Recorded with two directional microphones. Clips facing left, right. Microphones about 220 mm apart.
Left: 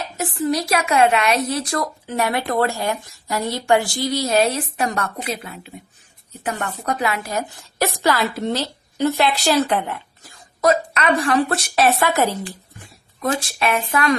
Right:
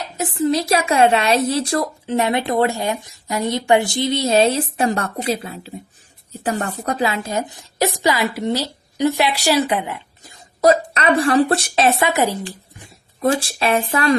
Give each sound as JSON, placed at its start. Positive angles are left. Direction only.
{"t": 0.2, "sound": "a woman's voice", "side_deg": -20}
{"t": 10.6, "sound": "speech", "side_deg": -30}
{"t": 13.1, "sound": "speech", "side_deg": -30}